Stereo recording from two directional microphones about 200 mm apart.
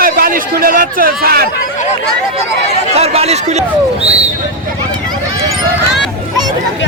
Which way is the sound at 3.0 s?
30° right (ahead or behind).